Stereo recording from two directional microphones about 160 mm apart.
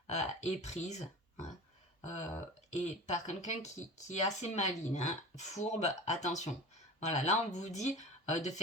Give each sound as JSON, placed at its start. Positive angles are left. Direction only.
{"t": 0.1, "sound": "speech", "side_deg": 45}
{"t": 2.8, "sound": "speech", "side_deg": 45}